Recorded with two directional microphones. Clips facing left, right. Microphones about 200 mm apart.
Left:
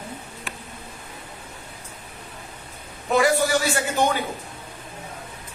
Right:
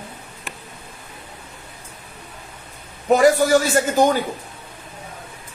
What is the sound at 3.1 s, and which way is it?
A man's voice, 40° right (ahead or behind).